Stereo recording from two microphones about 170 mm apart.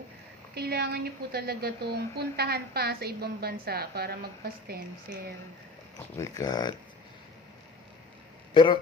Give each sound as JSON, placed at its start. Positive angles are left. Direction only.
{"t": 0.6, "sound": "a woman's voice", "side_deg": -70}
{"t": 6.1, "sound": "speech", "side_deg": 20}